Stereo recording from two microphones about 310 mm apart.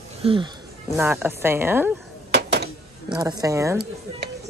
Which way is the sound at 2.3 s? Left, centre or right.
Right.